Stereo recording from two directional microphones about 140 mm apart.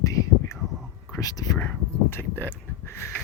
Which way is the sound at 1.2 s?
25° left (ahead or behind).